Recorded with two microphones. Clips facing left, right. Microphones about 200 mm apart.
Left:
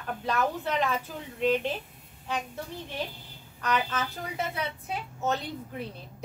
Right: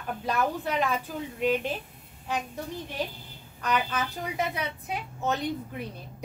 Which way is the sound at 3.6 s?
15° right (ahead or behind).